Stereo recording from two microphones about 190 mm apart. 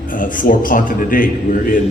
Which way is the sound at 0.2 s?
45° left (ahead or behind).